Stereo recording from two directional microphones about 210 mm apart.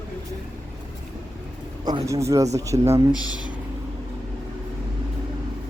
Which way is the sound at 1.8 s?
15° right (ahead or behind).